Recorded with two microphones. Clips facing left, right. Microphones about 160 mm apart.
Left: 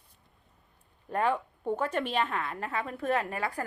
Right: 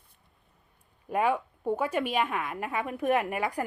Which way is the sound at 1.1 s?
10° right (ahead or behind).